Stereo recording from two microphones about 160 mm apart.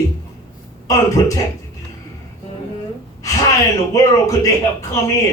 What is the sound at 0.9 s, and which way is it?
Speech, 20° left (ahead or behind).